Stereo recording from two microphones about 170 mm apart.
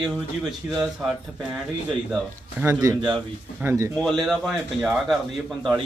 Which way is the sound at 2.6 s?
20° right (ahead or behind).